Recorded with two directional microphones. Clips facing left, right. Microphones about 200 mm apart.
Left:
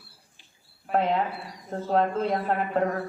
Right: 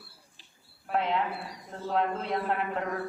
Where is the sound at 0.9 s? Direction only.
40° left (ahead or behind).